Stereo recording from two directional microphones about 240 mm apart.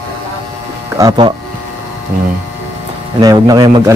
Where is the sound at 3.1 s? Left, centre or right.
Centre.